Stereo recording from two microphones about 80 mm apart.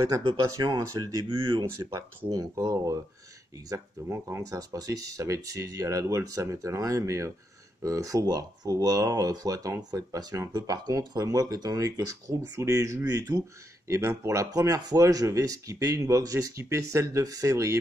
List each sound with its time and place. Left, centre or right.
0.4 s speech: right
1.3 s speech: right
1.8 s speech: right
2.3 s speech: right